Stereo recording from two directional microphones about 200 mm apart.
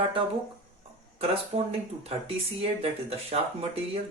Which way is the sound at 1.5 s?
25° right (ahead or behind).